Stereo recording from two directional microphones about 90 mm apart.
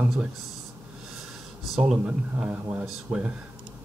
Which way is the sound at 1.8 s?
10° right (ahead or behind).